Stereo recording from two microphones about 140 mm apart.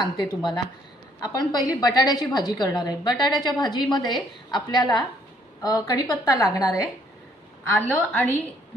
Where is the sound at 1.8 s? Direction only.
30° left (ahead or behind).